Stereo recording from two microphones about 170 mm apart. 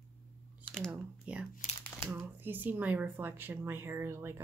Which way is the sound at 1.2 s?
5° right (ahead or behind).